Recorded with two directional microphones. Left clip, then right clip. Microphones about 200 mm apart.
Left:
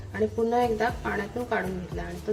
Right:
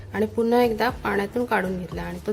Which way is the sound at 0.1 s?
45° right (ahead or behind).